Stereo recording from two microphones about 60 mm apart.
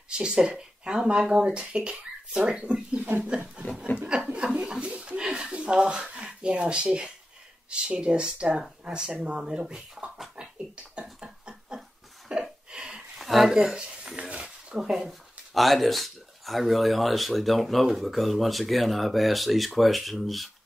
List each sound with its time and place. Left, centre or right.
0.2 s speech: centre
3.9 s speech: left
4.6 s speech: centre
10.3 s a sound: centre
12.3 s speech: centre